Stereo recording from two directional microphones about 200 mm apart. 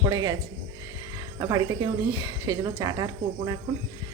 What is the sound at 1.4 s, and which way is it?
A woman's voice, 20° right (ahead or behind).